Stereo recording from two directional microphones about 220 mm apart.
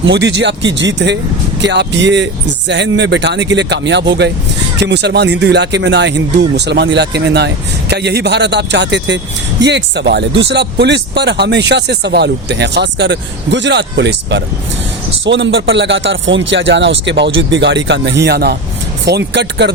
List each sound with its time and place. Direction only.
0.0 s speech: 50° right (ahead or behind)